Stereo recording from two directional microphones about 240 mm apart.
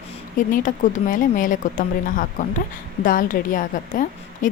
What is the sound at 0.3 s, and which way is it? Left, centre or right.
Speech, left.